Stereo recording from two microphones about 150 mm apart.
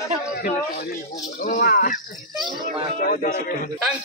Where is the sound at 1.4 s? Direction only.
80° left.